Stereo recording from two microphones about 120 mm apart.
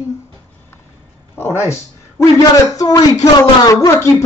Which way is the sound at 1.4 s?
20° left (ahead or behind).